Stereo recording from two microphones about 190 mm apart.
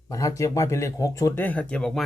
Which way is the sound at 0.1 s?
15° left (ahead or behind).